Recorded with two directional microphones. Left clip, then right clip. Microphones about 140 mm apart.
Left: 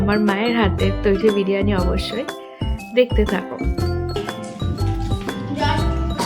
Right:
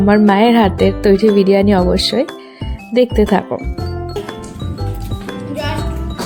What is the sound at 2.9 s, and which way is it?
Speech, 60° right (ahead or behind).